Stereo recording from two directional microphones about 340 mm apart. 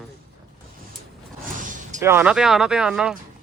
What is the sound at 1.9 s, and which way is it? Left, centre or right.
Speech, centre.